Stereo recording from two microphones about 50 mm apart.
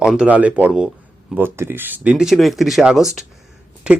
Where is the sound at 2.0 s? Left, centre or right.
Right.